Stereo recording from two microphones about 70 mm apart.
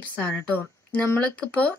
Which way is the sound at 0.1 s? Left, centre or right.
Left.